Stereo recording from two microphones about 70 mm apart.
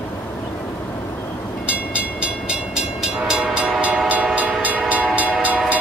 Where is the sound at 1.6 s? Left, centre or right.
Centre.